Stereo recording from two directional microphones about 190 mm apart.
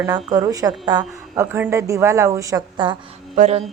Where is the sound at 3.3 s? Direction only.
35° right (ahead or behind).